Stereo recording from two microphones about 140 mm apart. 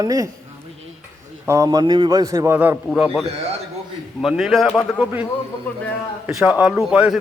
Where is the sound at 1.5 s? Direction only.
25° right (ahead or behind).